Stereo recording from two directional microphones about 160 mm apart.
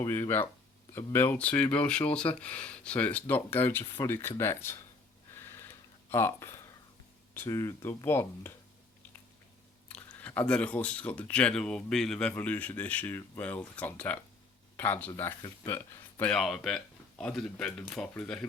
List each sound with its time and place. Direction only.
0.0 s speech: 15° left (ahead or behind)
5.5 s tick-tock: 15° left (ahead or behind)
7.3 s speech: 20° left (ahead or behind)
9.9 s speech: 10° left (ahead or behind)